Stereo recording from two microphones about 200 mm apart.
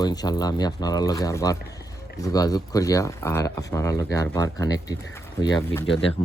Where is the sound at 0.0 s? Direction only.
20° left (ahead or behind).